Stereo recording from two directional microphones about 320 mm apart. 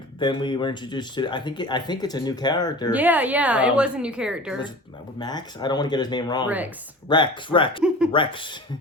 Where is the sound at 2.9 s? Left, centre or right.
Centre.